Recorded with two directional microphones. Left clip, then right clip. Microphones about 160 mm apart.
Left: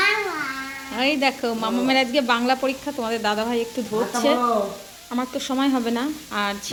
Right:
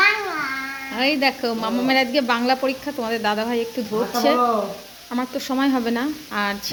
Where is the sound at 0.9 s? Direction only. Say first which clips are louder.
Right 1 dB; centre (ahead or behind).